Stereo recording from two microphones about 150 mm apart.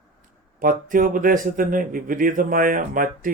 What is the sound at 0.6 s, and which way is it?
A man's voice, 65° right (ahead or behind).